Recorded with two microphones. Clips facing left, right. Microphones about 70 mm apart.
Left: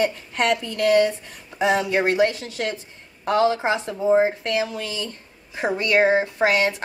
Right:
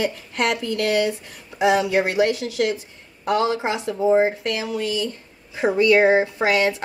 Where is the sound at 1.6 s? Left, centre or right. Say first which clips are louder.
Right 2 dB; centre.